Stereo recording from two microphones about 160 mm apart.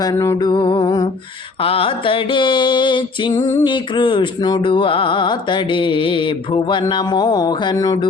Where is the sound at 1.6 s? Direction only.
35° left (ahead or behind).